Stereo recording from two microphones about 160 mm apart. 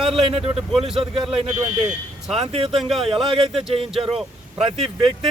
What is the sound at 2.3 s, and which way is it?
A man's voice, 35° right (ahead or behind).